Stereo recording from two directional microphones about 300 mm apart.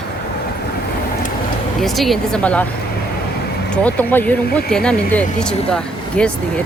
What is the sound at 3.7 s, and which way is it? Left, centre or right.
Speech, centre.